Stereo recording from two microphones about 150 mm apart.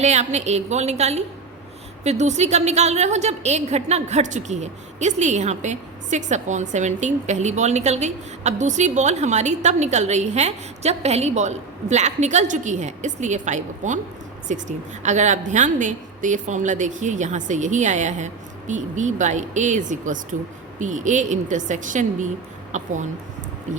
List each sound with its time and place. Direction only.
0.0 s a woman's voice: 50° right (ahead or behind)